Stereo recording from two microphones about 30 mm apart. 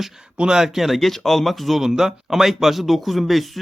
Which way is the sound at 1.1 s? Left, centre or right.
Centre.